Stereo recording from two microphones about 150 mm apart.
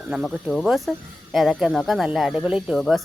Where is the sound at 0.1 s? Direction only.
Centre (ahead or behind).